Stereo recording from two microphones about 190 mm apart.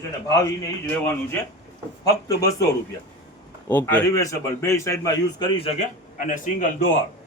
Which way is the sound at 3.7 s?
10° left (ahead or behind).